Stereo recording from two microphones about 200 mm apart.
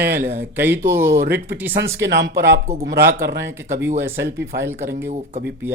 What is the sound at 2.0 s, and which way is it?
Speech, 60° right (ahead or behind).